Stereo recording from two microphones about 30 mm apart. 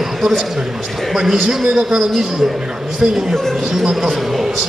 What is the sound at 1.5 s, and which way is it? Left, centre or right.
Speech, right.